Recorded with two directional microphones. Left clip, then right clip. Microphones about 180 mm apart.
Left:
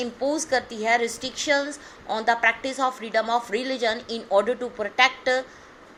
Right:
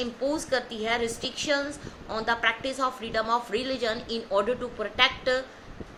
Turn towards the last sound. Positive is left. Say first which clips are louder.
# left 3 dB
turn(degrees=25)  # may be behind; listen again after turning